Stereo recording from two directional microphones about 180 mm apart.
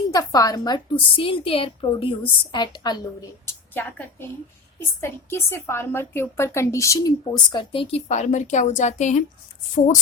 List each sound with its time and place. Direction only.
0.1 s a woman's voice: 20° left (ahead or behind); by 10.0 s 45° left (ahead or behind)